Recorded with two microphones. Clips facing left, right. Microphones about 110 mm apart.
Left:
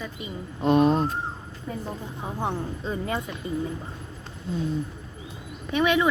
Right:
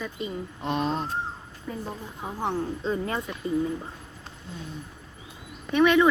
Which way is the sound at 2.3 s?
15° left (ahead or behind).